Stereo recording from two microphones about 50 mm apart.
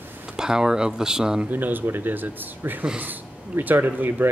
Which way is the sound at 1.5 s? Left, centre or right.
Right.